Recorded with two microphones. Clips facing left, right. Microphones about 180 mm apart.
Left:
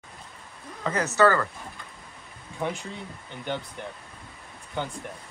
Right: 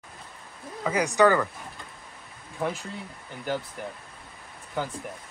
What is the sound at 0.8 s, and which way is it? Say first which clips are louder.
Speech: right 1 dB; 15° right (ahead or behind).